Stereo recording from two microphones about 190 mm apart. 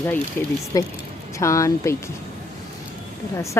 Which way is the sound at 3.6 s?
10° left (ahead or behind).